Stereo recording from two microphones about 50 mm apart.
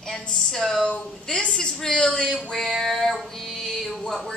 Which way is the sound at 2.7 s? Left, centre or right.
Centre.